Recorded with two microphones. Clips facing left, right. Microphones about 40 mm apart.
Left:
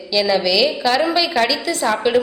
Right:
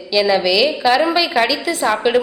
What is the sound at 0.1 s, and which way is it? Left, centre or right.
A woman's voice, centre.